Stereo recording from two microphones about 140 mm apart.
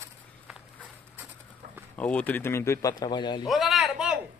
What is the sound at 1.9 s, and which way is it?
A man's voice, 10° left (ahead or behind).